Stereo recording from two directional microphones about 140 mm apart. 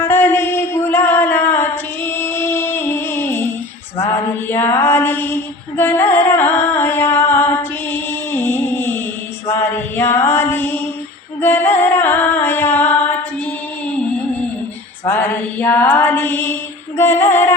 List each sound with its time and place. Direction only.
0.0 s a sound: 15° left (ahead or behind)
3.9 s mantra: 15° left (ahead or behind)
11.3 s music: 15° left (ahead or behind)
15.0 s mantra: 10° left (ahead or behind)
17.0 s music: 15° left (ahead or behind)